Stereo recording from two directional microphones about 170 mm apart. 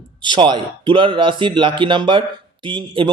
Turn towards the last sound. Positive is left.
turn(degrees=-30)  # may be behind; listen again after turning